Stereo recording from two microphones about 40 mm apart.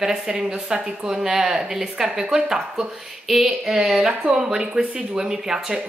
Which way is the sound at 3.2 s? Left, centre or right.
Centre.